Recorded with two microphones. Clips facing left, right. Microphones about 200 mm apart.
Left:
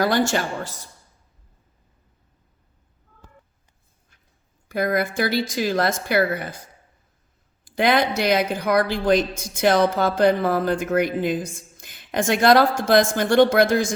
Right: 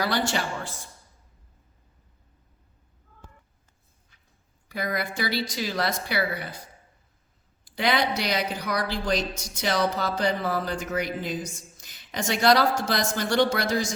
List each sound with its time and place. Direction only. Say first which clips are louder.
0.0 s speech: left 6 dB; 45° left (ahead or behind)
4.7 s speech: left 8 dB; 50° left (ahead or behind)
7.6 s speech: left 5 dB; 50° left (ahead or behind)